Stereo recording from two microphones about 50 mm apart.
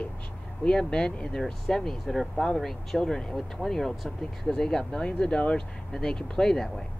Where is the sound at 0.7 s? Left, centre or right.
Centre.